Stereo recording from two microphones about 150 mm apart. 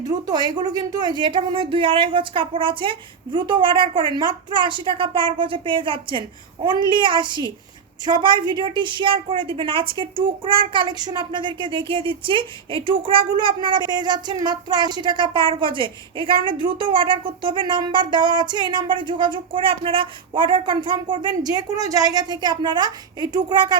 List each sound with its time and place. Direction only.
0.0 s a woman's voice: 25° right (ahead or behind)